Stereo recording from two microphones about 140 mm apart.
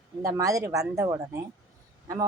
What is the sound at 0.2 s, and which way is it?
A woman's voice, 25° right (ahead or behind).